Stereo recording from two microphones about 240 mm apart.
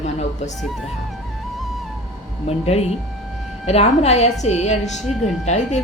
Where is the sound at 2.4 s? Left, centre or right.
Left.